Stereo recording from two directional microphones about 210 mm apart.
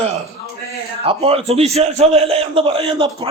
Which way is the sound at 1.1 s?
25° right (ahead or behind).